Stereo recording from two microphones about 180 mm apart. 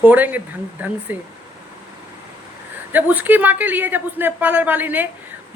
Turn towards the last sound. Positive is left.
turn(degrees=-10)  # may be behind; listen again after turning